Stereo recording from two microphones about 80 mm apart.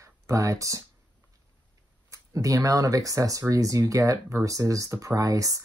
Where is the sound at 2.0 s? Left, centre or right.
Right.